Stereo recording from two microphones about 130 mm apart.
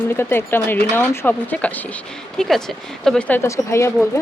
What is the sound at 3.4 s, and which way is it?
Speech, 20° left (ahead or behind).